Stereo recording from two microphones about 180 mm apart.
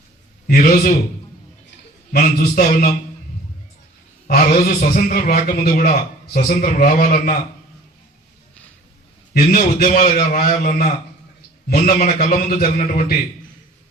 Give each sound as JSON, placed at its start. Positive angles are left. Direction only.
{"t": 0.4, "sound": "a man's voice", "side_deg": 55}
{"t": 2.1, "sound": "a man's voice", "side_deg": 45}
{"t": 4.3, "sound": "a man's voice", "side_deg": 55}
{"t": 9.6, "sound": "a man's voice", "side_deg": 45}
{"t": 9.9, "sound": "a man's voice", "side_deg": 55}